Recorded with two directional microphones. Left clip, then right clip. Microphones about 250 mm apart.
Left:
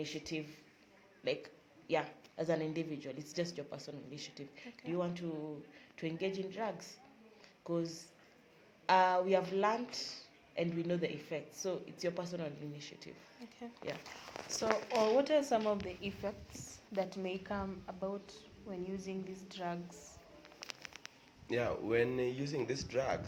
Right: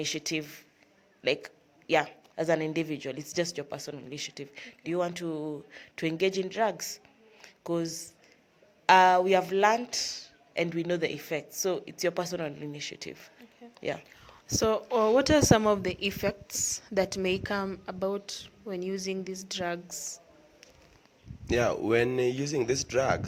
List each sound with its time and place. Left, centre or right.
0.0 s speech: right
14.4 s speech: right
21.4 s speech: right